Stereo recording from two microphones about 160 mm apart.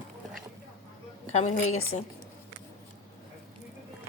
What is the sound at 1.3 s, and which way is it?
Speech, 45° left (ahead or behind).